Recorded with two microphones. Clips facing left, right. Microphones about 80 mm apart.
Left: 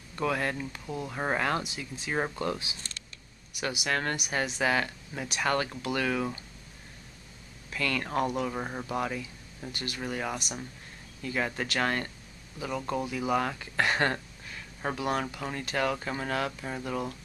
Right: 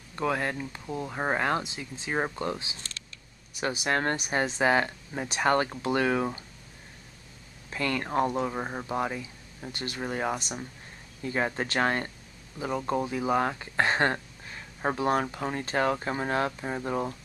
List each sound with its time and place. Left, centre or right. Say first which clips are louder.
0.2 s speech: right 1 dB; centre
7.7 s speech: right 2 dB; right
8.5 s speech: right 2 dB; centre